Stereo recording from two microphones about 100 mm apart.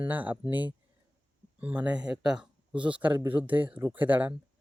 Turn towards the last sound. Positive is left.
turn(degrees=-15)  # may be behind; listen again after turning